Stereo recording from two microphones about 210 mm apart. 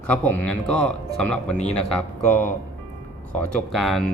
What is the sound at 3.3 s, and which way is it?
Speech, centre (ahead or behind).